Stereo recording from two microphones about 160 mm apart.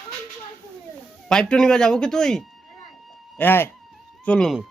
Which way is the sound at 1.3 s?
5° left (ahead or behind).